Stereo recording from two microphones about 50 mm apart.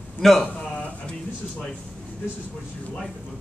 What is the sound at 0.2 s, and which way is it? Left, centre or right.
Speech, centre.